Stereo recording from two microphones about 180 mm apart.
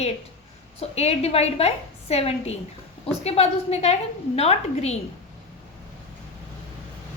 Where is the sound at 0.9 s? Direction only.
35° left (ahead or behind).